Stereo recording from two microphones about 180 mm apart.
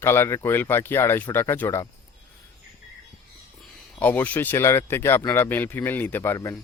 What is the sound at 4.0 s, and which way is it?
A man's voice, 10° left (ahead or behind).